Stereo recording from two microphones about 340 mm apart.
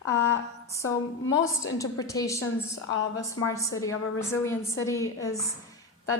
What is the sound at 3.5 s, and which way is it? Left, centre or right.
A woman's voice, centre.